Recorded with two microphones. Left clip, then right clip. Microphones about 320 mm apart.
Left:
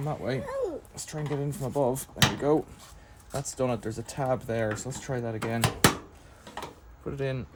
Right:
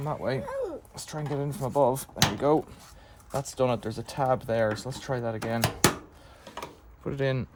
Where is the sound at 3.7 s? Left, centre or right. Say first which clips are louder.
Right 2 dB; centre.